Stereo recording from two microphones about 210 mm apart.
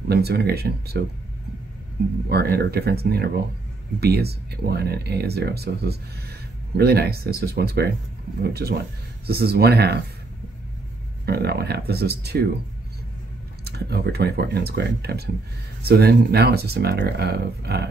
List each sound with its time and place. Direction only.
0.1 s speech: 50° right (ahead or behind)
2.2 s speech: 50° right (ahead or behind)
11.2 s speech: 50° right (ahead or behind)
13.7 s speech: 50° right (ahead or behind)